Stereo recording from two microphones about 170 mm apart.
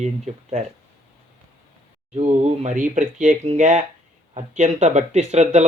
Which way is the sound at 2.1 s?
40° right (ahead or behind).